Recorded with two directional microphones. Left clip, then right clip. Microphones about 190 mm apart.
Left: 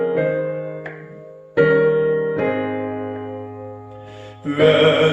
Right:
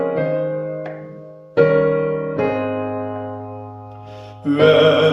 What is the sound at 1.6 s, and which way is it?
Music, 40° right (ahead or behind).